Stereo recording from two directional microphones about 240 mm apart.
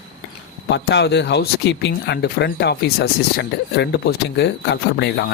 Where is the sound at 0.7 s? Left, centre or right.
Left.